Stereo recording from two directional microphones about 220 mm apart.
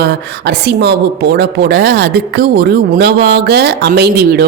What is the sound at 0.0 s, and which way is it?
A woman's voice, 50° right (ahead or behind).